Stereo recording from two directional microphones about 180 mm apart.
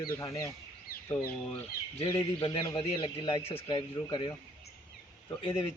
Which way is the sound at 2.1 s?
25° left (ahead or behind).